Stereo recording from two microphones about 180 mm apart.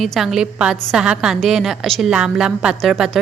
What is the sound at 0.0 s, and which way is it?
A woman's voice, centre (ahead or behind).